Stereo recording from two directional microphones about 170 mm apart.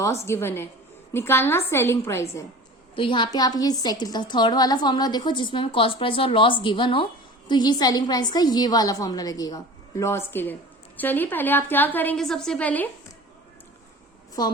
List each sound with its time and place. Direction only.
0.0 s a woman's voice: 15° left (ahead or behind)
2.9 s a woman's voice: 30° left (ahead or behind); by 12.9 s 10° left (ahead or behind)